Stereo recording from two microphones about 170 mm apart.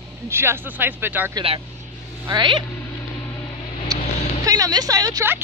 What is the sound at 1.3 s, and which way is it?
Speech, 35° right (ahead or behind).